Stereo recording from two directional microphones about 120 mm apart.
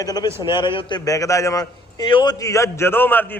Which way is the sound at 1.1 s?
25° left (ahead or behind).